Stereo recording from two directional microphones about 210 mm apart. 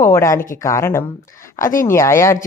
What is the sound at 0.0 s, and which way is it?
Speech, 15° left (ahead or behind).